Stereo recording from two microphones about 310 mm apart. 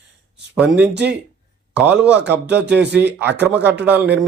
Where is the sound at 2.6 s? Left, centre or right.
Right.